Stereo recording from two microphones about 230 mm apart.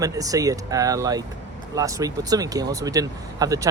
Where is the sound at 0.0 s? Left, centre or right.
Centre.